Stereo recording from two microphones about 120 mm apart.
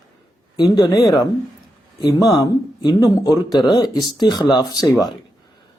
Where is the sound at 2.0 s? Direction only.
30° left (ahead or behind).